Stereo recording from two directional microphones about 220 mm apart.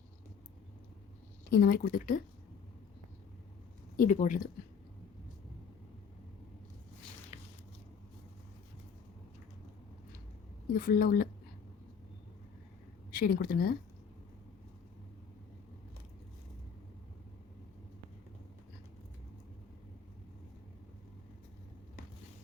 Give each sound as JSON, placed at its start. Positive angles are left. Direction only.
{"t": 1.5, "sound": "speech", "side_deg": 45}
{"t": 3.9, "sound": "speech", "side_deg": 35}
{"t": 10.8, "sound": "speech", "side_deg": 40}
{"t": 13.1, "sound": "speech", "side_deg": 40}